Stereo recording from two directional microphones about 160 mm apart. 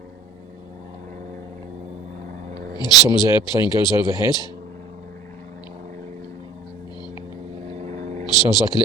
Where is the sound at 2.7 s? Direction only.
25° left (ahead or behind).